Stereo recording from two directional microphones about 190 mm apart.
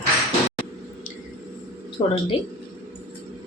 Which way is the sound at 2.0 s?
25° left (ahead or behind).